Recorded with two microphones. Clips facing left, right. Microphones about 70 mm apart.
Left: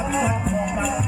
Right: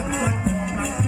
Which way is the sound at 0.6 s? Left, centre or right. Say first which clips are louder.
Left 2 dB; right.